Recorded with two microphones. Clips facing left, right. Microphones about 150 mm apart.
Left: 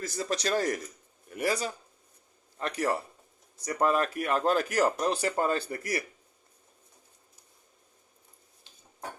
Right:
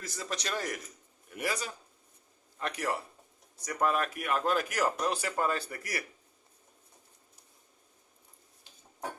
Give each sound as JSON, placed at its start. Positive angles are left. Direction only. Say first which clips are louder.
{"t": 0.0, "sound": "speech", "louder": "left 7 dB", "side_deg": 35}